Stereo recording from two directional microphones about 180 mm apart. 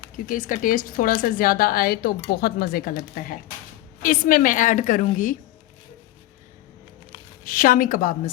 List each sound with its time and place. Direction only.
0.3 s a woman's voice: 50° left (ahead or behind)
7.4 s a woman's voice: 50° left (ahead or behind)